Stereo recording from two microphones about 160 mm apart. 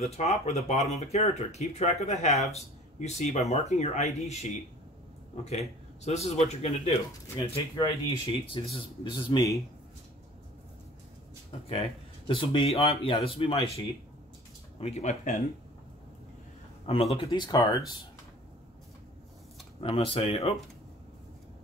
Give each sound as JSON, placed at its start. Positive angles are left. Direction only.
{"t": 0.0, "sound": "speech", "side_deg": 40}
{"t": 7.3, "sound": "speech", "side_deg": 30}
{"t": 12.3, "sound": "speech", "side_deg": 35}
{"t": 14.8, "sound": "speech", "side_deg": 45}
{"t": 16.8, "sound": "speech", "side_deg": 40}
{"t": 19.8, "sound": "speech", "side_deg": 35}